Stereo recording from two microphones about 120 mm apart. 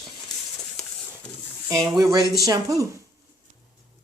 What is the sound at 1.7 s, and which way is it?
Speech, 30° right (ahead or behind).